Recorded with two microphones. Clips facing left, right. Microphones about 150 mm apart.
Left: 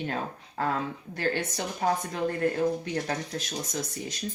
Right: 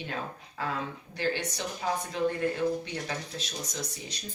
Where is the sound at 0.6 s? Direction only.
50° left (ahead or behind).